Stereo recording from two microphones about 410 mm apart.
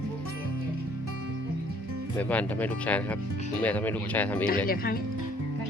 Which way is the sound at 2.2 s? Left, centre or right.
Centre.